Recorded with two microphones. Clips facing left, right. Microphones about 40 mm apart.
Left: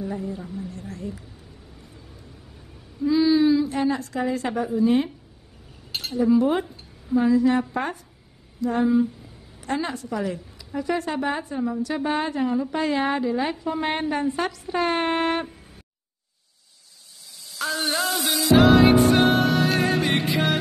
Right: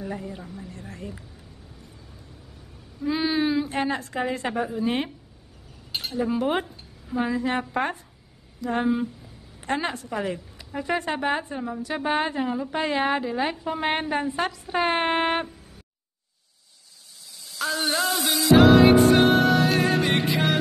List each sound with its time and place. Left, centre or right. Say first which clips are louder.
0.0 s a woman's voice: left 3 dB; right
3.1 s a woman's voice: left 6 dB; right
5.9 s chink: even; centre
6.1 s a woman's voice: left 7 dB; right
7.2 s a woman's voice: left 6 dB; right
8.6 s a woman's voice: left 4 dB; right
12.4 s a woman's voice: left 3 dB; centre
17.6 s music: even; centre